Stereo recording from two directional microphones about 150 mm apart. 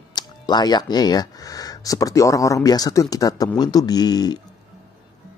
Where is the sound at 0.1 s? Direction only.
30° left (ahead or behind).